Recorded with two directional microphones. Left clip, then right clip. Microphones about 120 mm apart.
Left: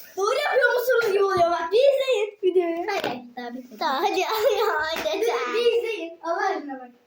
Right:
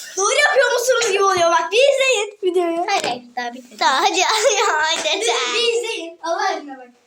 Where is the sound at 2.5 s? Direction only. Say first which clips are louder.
Right 4 dB; 5° left (ahead or behind).